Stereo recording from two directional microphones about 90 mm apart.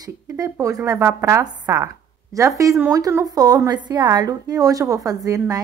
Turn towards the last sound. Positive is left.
turn(degrees=-40)  # may be behind; listen again after turning